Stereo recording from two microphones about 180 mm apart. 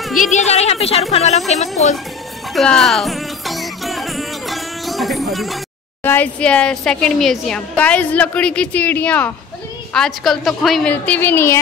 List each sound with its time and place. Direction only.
0.2 s a woman's voice: 40° left (ahead or behind)
2.5 s music: 5° left (ahead or behind)
6.0 s a woman's voice: 10° left (ahead or behind)